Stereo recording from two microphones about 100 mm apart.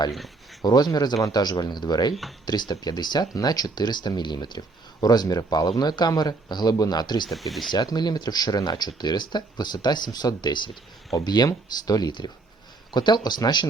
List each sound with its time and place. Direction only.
0.6 s speech: 40° left (ahead or behind)
7.3 s speech: centre (ahead or behind)
7.7 s speech: 45° left (ahead or behind)